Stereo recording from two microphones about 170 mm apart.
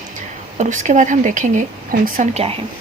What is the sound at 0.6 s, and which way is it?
Speech, 45° right (ahead or behind).